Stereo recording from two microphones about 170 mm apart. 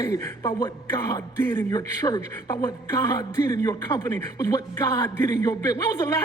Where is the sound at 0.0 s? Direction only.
20° left (ahead or behind).